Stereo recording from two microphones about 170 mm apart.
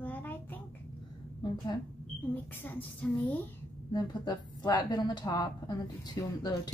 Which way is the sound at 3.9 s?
25° left (ahead or behind).